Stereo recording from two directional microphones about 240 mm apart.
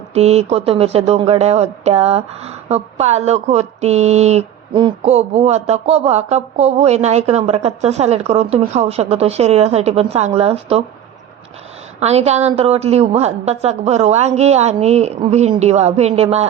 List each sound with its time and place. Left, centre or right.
0.1 s speech: right
11.9 s speech: right